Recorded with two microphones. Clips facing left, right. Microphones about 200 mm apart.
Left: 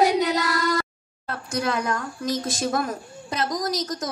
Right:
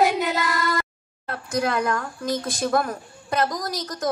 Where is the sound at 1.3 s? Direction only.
55° right (ahead or behind).